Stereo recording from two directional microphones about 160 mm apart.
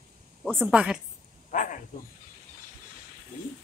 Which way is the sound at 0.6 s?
5° right (ahead or behind).